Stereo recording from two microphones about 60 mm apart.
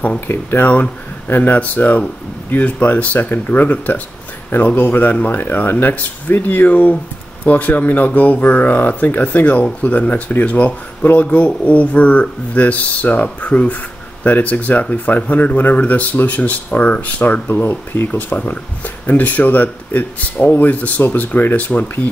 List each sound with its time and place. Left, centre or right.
0.3 s speech: left
17.5 s speech: left